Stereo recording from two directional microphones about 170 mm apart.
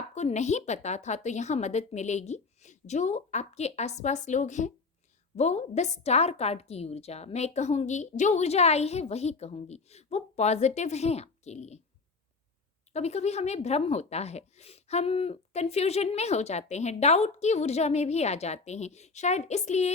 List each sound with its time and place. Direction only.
0.1 s a woman's voice: 40° left (ahead or behind)
12.9 s a woman's voice: 40° left (ahead or behind)